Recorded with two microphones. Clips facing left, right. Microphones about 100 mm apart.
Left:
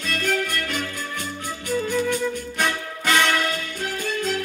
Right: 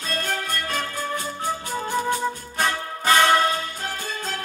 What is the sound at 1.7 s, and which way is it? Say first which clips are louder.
Music: left 6 dB; 40° right (ahead or behind).